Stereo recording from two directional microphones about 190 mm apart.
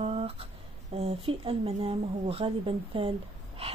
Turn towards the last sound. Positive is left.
turn(degrees=-30)  # may be behind; listen again after turning